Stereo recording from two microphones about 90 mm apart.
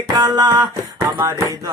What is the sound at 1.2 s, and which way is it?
Music, 35° right (ahead or behind).